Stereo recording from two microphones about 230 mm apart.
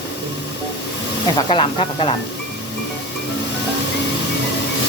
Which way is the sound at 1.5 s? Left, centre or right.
Left.